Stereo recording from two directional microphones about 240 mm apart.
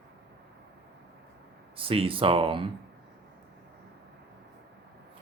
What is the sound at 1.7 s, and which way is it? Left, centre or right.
Speech, right.